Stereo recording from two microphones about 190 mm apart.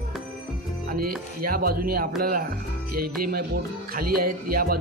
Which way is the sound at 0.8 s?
50° right (ahead or behind).